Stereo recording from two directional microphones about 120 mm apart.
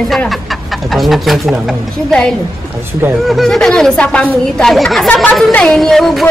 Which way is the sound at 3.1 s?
Centre (ahead or behind).